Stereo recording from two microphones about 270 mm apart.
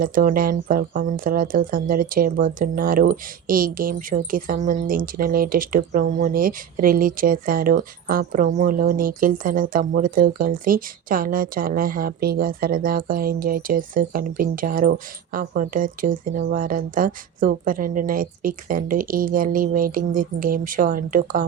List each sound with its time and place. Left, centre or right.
0.0 s speech: right